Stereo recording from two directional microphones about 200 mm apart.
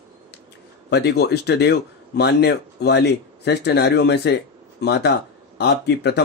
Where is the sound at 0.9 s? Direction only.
55° left (ahead or behind).